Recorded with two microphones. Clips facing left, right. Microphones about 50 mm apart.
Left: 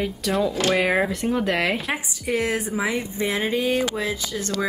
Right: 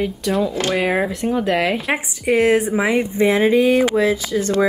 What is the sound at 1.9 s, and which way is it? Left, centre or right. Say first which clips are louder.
A woman's voice: right 7 dB; right.